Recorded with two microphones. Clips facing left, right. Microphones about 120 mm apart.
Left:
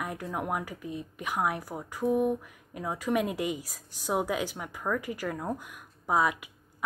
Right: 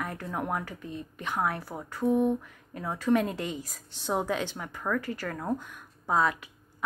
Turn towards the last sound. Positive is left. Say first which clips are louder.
# even
turn(degrees=10)  # may be behind; listen again after turning